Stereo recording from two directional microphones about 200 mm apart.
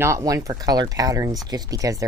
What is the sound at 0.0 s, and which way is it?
Speech, 15° right (ahead or behind).